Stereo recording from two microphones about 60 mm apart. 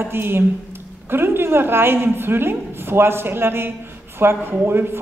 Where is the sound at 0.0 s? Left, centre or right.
Right.